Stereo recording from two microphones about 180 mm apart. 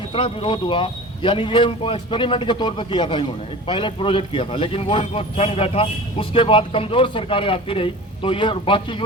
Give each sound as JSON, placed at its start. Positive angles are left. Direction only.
{"t": 0.1, "sound": "a man's voice", "side_deg": 30}